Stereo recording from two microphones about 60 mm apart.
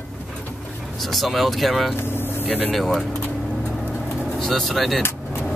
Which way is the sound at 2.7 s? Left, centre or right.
Centre.